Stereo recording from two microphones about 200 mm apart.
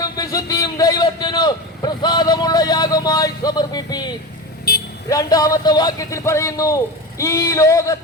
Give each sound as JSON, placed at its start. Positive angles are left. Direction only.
{"t": 0.0, "sound": "a man's voice", "side_deg": 20}
{"t": 4.7, "sound": "vehicle", "side_deg": 50}
{"t": 5.0, "sound": "a man's voice", "side_deg": 15}